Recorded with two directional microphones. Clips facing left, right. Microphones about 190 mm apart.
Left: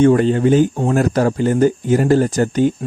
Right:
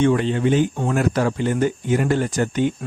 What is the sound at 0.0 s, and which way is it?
Speech, 45° left (ahead or behind).